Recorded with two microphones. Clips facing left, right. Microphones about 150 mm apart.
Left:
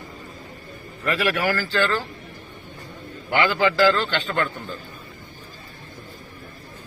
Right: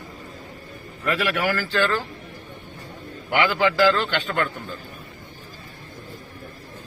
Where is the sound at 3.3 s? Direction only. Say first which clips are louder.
Even; 15° right (ahead or behind).